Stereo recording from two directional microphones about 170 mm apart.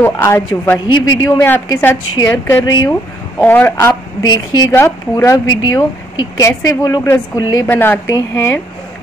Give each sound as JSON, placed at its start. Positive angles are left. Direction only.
{"t": 0.0, "sound": "a woman's voice", "side_deg": 15}
{"t": 1.4, "sound": "a woman's voice", "side_deg": 10}
{"t": 7.6, "sound": "a woman's voice", "side_deg": 10}